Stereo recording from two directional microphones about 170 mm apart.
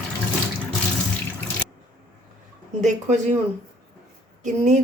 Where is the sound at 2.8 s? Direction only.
45° right (ahead or behind).